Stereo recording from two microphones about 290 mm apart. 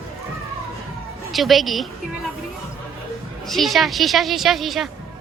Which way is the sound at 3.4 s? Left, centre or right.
Centre.